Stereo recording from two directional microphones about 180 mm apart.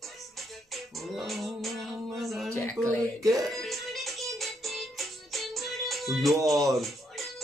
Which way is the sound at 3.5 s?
Centre (ahead or behind).